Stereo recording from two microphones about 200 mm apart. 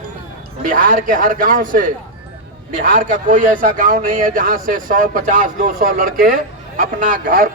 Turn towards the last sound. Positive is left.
turn(degrees=-45)  # may be behind; listen again after turning